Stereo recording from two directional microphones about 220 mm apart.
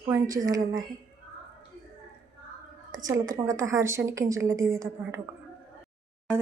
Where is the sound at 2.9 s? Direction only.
15° right (ahead or behind).